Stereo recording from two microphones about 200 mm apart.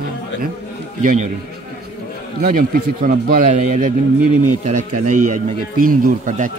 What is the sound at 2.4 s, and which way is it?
A man's voice, 45° right (ahead or behind).